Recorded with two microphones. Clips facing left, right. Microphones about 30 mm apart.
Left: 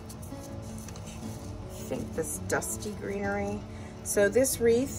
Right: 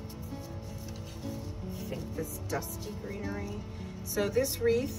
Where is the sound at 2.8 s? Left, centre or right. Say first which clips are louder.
Left 6 dB; left.